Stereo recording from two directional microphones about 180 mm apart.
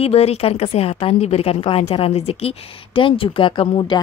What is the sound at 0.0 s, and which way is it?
A woman's voice, 35° left (ahead or behind).